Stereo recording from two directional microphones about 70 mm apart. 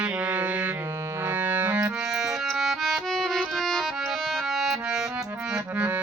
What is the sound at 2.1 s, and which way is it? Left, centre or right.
Music, centre.